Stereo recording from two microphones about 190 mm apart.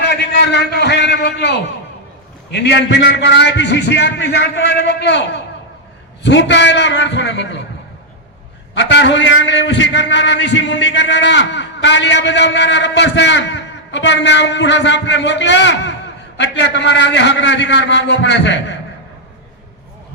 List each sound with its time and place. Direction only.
0.0 s a sound: 65° left (ahead or behind)
2.5 s a man's voice: 60° left (ahead or behind)
8.7 s a man's voice: 65° left (ahead or behind)